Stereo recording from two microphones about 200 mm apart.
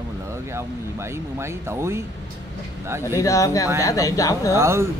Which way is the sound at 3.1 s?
15° left (ahead or behind).